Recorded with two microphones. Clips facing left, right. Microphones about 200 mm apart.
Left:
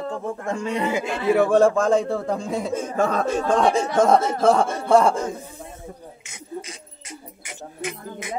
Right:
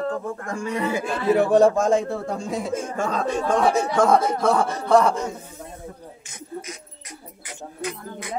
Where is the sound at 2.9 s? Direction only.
60° left (ahead or behind).